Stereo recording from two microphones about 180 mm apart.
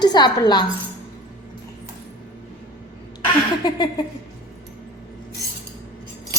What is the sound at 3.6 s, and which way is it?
Speech, 25° left (ahead or behind).